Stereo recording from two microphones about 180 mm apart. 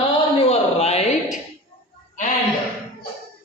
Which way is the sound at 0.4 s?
35° left (ahead or behind).